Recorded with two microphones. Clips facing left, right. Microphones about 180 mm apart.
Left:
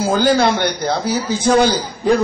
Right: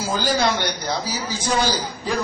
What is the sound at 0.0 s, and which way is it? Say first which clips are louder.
A man's voice: left 7 dB; 55° left (ahead or behind).